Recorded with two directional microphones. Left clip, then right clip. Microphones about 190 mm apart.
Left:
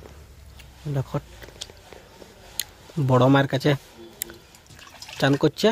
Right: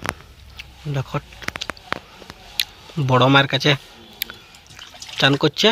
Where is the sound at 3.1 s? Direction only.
15° left (ahead or behind).